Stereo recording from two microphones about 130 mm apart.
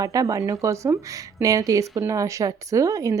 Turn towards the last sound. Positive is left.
turn(degrees=-25)  # may be behind; listen again after turning